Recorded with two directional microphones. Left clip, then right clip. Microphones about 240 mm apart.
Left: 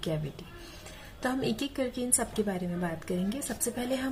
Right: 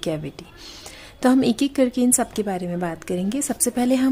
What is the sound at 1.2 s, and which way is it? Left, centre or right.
A woman's voice, right.